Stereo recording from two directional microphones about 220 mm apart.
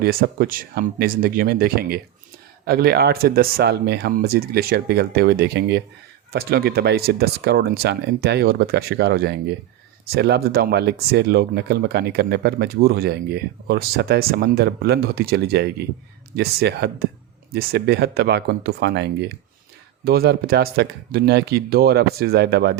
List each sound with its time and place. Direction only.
0.0 s speech: 40° right (ahead or behind)